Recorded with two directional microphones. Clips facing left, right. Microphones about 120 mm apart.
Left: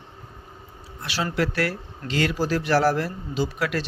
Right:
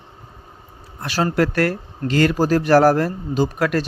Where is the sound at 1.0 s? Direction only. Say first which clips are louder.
Right 6 dB; 45° right (ahead or behind).